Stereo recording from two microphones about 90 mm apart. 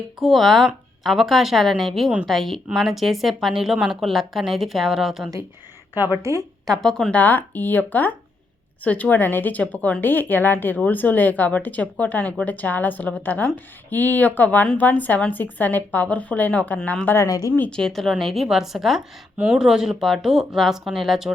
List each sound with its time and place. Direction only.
0.2 s a woman's voice: centre (ahead or behind)
5.9 s speech: 25° right (ahead or behind)
6.7 s a woman's voice: 5° left (ahead or behind)
7.2 s speech: 20° left (ahead or behind)
17.2 s speech: 40° left (ahead or behind)
17.5 s a woman's voice: 15° left (ahead or behind); by 21.3 s 5° right (ahead or behind)